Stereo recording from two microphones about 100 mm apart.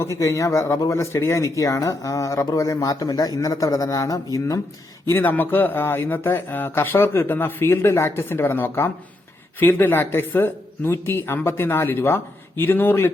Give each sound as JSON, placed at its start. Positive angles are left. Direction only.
{"t": 0.0, "sound": "speech", "side_deg": 30}
{"t": 5.0, "sound": "speech", "side_deg": 20}